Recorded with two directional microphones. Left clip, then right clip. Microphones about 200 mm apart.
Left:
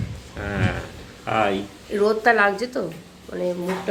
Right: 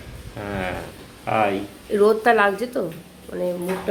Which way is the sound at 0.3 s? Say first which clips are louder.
Left 1 dB; 10° right (ahead or behind).